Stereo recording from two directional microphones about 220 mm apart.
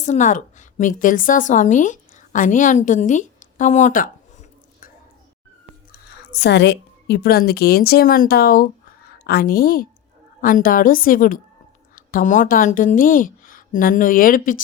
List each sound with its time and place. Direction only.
0.0 s a woman's voice: 35° left (ahead or behind)
6.3 s a woman's voice: 50° left (ahead or behind)